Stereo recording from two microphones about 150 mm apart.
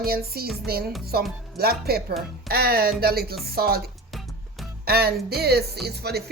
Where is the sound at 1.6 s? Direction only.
90° right.